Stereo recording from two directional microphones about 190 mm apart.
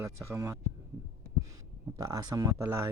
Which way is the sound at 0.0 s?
15° right (ahead or behind).